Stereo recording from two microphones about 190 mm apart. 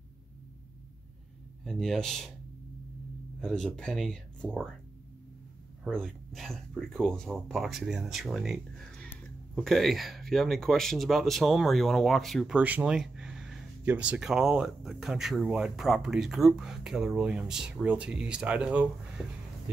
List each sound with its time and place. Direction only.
1.6 s speech: centre (ahead or behind)
3.3 s speech: centre (ahead or behind)
5.9 s speech: centre (ahead or behind)